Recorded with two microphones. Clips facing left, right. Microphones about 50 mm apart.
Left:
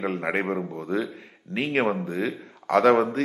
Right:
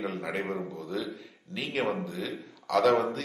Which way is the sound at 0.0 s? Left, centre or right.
Left.